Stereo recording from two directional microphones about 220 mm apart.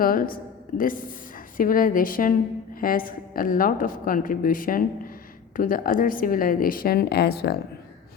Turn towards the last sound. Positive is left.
turn(degrees=45)  # may be behind; listen again after turning